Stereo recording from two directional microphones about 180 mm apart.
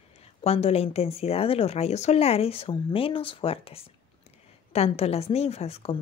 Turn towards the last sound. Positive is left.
turn(degrees=35)  # may be behind; listen again after turning